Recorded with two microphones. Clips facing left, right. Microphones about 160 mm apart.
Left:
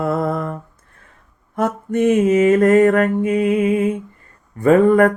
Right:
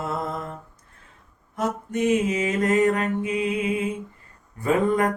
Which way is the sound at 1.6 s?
55° left (ahead or behind).